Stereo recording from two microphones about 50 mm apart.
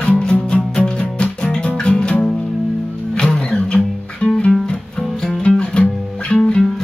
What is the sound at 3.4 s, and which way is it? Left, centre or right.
Music, left.